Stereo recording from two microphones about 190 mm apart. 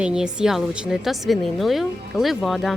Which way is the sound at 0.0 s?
5° right (ahead or behind).